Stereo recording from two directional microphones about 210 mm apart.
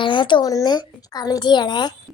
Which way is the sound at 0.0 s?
20° left (ahead or behind).